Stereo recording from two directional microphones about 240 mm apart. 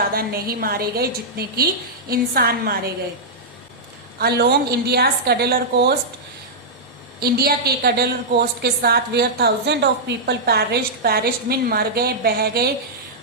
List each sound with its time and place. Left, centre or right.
0.1 s a woman's voice: right
4.2 s a woman's voice: right
7.2 s a woman's voice: right